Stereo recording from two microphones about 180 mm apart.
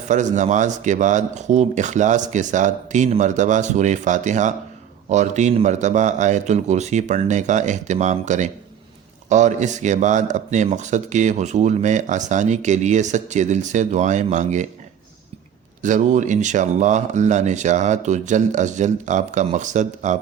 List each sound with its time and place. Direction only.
0.1 s speech: 40° right (ahead or behind)
15.8 s speech: 45° right (ahead or behind)